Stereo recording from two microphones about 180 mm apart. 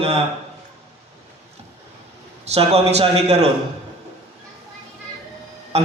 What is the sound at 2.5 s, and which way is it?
Speech, 35° right (ahead or behind).